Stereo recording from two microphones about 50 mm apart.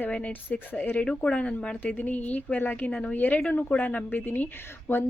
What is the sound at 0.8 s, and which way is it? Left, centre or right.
Speech, left.